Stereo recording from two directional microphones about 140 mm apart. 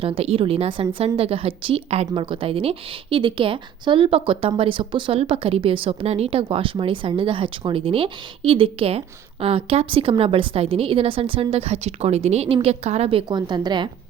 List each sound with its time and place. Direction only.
0.0 s a woman's voice: 40° right (ahead or behind)